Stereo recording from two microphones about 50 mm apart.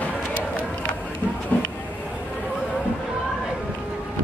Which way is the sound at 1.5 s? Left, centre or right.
Left.